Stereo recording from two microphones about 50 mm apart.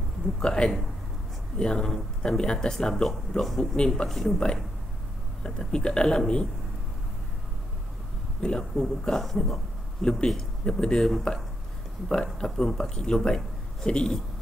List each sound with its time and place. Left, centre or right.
0.4 s speech: centre
5.4 s speech: centre
8.4 s speech: centre
10.0 s speech: centre
11.1 s speech: centre